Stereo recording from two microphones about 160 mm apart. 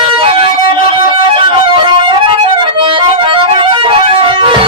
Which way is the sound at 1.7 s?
30° right (ahead or behind).